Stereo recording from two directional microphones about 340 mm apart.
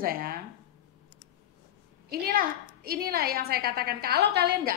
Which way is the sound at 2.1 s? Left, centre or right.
Right.